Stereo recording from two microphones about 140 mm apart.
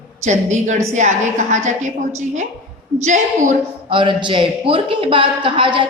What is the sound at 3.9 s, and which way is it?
A man's voice, 35° right (ahead or behind).